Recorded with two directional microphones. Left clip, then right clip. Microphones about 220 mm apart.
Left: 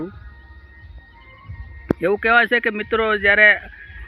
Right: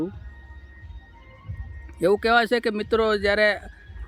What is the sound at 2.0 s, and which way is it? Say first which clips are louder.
Speech: left 3 dB; 15° right (ahead or behind).